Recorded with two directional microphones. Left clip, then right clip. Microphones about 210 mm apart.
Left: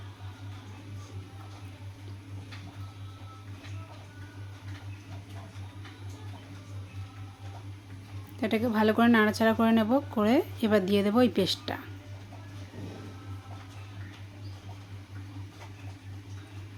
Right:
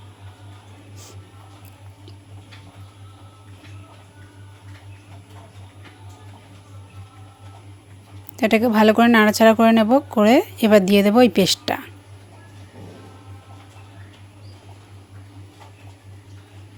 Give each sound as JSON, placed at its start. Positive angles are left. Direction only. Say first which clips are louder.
{"t": 8.4, "sound": "speech", "louder": "right 11 dB", "side_deg": -35}